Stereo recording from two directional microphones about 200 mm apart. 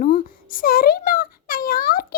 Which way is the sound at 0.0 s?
45° left (ahead or behind).